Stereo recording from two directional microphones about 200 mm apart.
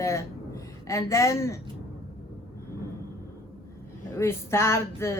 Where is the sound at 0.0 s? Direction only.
15° left (ahead or behind).